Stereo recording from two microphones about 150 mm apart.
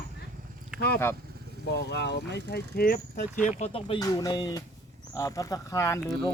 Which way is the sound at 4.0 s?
25° left (ahead or behind).